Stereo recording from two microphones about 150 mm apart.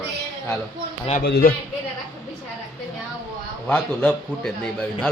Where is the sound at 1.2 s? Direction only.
90° left.